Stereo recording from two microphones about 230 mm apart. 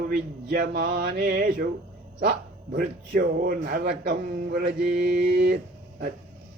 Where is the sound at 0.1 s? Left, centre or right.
Right.